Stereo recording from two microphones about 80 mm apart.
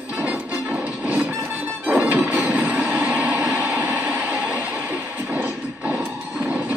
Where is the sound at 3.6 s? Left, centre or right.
Centre.